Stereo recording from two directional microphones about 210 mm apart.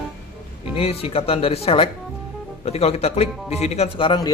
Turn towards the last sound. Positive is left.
turn(degrees=20)  # may be behind; listen again after turning